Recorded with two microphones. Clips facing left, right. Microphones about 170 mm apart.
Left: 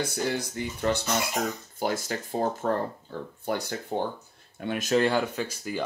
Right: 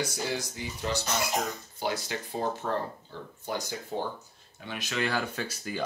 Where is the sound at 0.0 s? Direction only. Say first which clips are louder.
Left 3 dB; 60° left (ahead or behind).